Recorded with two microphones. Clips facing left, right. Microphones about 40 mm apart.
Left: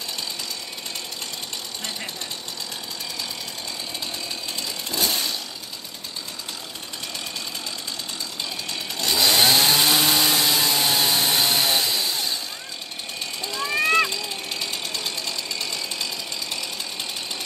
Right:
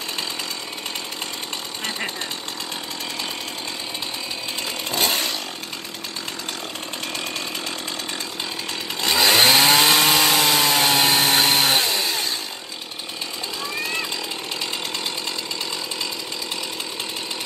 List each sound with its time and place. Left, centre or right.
4.9 s chainsaw: right
9.1 s chainsaw: right
13.7 s jackhammer: left